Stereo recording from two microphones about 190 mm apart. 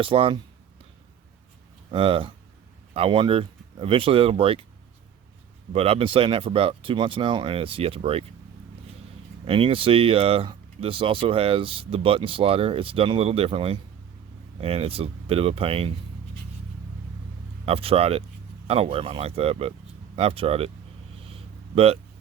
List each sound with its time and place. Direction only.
0.0 s speech: 30° right (ahead or behind)
1.9 s speech: 30° right (ahead or behind)
5.7 s speech: 30° right (ahead or behind)
9.4 s speech: 30° right (ahead or behind)
17.7 s speech: 30° right (ahead or behind)